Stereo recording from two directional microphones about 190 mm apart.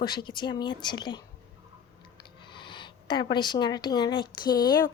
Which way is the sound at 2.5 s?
25° left (ahead or behind).